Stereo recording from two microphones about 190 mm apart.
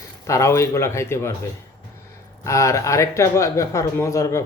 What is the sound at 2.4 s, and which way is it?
Speech, 15° left (ahead or behind).